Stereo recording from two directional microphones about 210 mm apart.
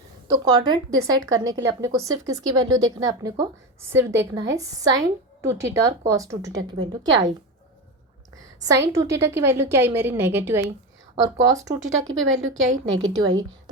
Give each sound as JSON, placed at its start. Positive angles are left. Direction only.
{"t": 0.3, "sound": "a woman's voice", "side_deg": -20}
{"t": 8.6, "sound": "a woman's voice", "side_deg": -15}
{"t": 12.7, "sound": "a woman's voice", "side_deg": -70}